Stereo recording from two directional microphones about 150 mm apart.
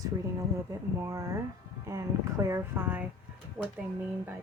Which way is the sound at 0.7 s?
20° right (ahead or behind).